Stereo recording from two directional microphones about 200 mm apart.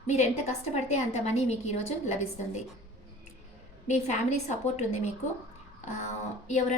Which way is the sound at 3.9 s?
35° left (ahead or behind).